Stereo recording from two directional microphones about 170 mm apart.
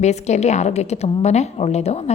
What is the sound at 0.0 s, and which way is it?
A woman's voice, 40° left (ahead or behind).